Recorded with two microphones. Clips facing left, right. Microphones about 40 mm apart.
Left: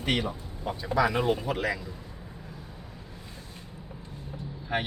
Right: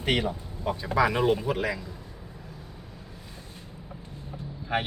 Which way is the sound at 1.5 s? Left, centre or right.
Centre.